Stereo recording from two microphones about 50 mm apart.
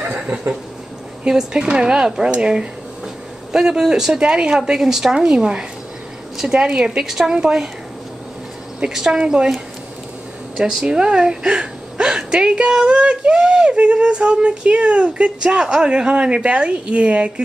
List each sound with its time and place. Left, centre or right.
0.0 s a sound: right
1.2 s a woman's voice: centre
8.9 s speech: centre
10.6 s a woman's voice: centre